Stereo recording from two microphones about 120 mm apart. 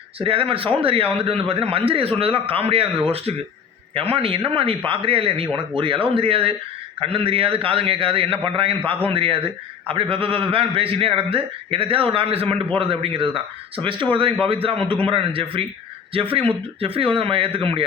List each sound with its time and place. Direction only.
0.2 s a man's voice: 50° right (ahead or behind)